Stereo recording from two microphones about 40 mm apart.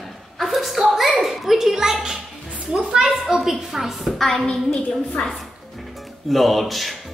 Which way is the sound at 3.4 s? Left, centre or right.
Centre.